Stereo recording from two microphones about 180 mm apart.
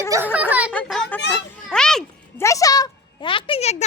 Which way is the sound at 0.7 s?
5° left (ahead or behind).